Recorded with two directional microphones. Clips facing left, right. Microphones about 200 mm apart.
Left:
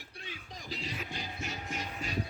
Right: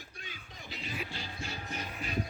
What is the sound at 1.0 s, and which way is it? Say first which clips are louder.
Music: left 1 dB; 15° left (ahead or behind).